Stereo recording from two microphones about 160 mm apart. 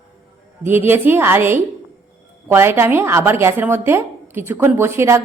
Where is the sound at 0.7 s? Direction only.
15° right (ahead or behind).